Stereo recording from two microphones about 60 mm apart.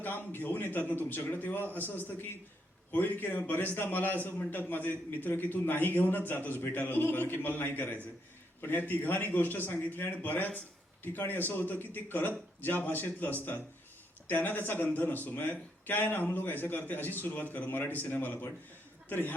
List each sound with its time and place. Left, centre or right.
0.0 s a man's voice: left